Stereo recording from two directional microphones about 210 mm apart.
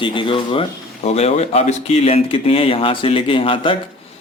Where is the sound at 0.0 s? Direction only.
25° left (ahead or behind).